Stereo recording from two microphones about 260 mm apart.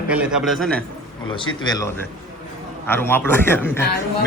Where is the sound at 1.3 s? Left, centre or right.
Centre.